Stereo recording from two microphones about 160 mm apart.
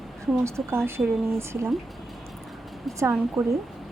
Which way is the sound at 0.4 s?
15° right (ahead or behind).